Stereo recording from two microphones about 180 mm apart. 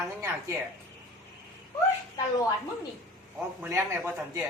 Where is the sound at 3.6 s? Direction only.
10° right (ahead or behind).